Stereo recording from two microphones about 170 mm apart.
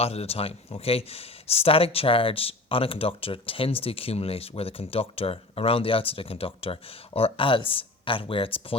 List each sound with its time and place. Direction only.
0.0 s speech: 35° left (ahead or behind)